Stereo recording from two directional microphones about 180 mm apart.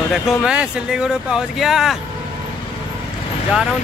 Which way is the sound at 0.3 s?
5° right (ahead or behind).